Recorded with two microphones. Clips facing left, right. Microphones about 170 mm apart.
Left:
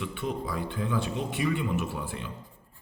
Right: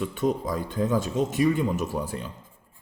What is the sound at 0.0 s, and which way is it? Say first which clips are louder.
Speech: right 7 dB; 40° right (ahead or behind).